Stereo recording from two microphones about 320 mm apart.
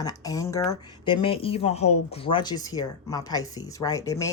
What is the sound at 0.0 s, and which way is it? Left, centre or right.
Speech, centre.